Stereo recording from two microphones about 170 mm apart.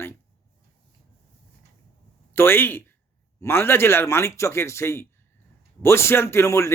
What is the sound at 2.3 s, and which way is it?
Speech, 15° left (ahead or behind).